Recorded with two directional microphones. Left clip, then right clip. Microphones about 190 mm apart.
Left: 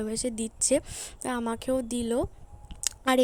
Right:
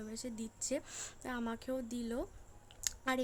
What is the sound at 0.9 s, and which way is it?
Speech, 20° left (ahead or behind).